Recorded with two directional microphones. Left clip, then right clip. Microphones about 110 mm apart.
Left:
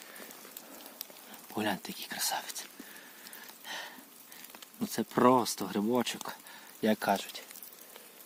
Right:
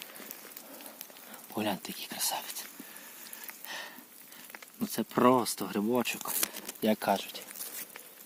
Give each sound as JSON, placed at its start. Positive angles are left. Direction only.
{"t": 1.5, "sound": "speech", "side_deg": -25}
{"t": 3.7, "sound": "a sound", "side_deg": -15}
{"t": 4.8, "sound": "speech", "side_deg": -20}
{"t": 6.8, "sound": "speech", "side_deg": -25}